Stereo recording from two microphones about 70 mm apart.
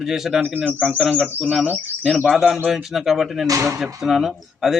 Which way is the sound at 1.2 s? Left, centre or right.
Centre.